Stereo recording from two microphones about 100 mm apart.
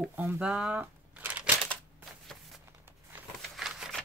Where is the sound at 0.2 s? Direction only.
10° right (ahead or behind).